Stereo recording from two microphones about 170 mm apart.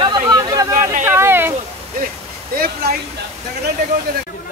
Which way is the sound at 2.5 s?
60° right (ahead or behind).